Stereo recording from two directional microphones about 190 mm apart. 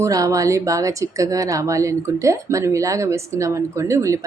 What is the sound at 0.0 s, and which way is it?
Speech, 15° right (ahead or behind).